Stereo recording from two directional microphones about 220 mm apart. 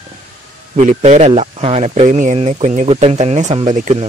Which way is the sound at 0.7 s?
30° right (ahead or behind).